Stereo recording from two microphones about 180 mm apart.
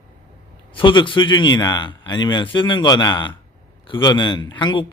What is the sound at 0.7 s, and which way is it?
A man's voice, 25° left (ahead or behind).